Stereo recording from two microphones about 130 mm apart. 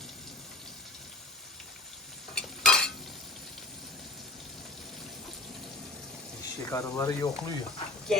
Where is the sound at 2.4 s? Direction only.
5° left (ahead or behind).